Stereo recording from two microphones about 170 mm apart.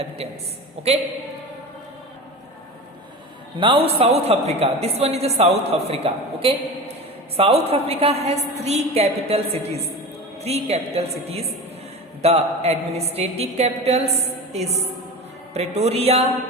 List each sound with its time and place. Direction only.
3.6 s a woman's voice: 30° right (ahead or behind)